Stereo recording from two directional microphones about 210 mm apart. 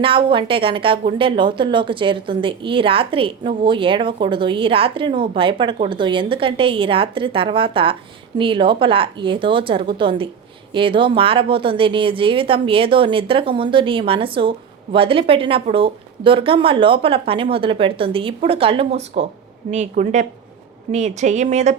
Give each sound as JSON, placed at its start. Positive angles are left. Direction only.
{"t": 0.0, "sound": "a woman's voice", "side_deg": -25}